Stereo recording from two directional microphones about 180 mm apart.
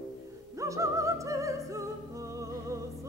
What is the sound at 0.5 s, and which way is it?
Music, 15° right (ahead or behind).